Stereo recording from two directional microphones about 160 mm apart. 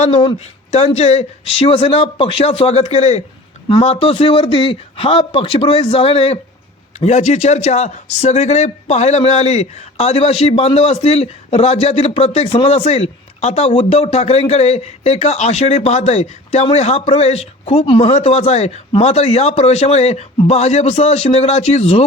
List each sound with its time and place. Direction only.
0.3 s speech: 40° left (ahead or behind)